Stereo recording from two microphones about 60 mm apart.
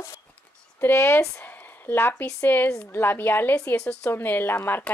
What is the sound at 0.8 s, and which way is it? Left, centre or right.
Speech, left.